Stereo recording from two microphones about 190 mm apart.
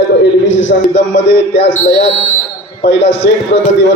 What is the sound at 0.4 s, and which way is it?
Speech, 75° left (ahead or behind).